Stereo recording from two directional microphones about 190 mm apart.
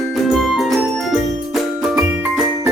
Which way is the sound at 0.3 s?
Centre (ahead or behind).